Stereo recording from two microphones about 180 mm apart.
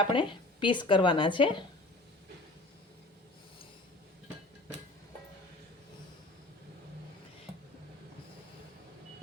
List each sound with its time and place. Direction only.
0.0 s speech: 30° left (ahead or behind)